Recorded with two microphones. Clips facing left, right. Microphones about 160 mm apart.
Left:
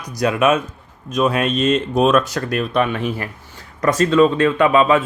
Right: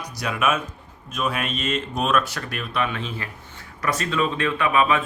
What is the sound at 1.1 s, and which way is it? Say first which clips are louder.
Speech: left 9 dB; 40° left (ahead or behind).